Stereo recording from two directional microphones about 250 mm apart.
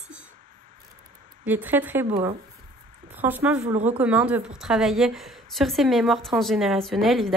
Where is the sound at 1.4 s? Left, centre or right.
Centre.